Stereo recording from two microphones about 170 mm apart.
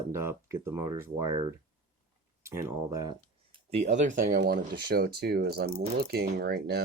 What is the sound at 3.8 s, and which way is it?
Speech, 45° right (ahead or behind).